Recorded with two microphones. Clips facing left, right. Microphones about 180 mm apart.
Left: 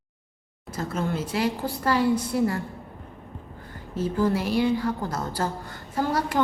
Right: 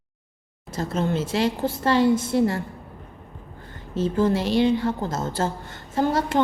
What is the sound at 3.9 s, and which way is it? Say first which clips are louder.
A woman's voice: right 3 dB; 25° right (ahead or behind).